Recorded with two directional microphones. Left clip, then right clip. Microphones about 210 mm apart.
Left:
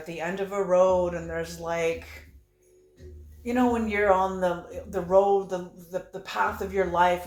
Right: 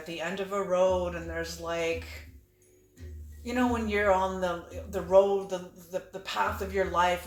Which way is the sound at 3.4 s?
15° left (ahead or behind).